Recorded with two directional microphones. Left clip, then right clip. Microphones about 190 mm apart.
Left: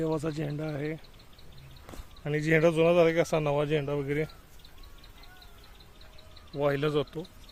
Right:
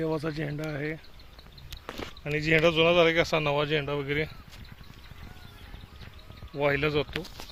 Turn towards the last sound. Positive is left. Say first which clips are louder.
# right 2 dB
turn(degrees=0)  # may be behind; listen again after turning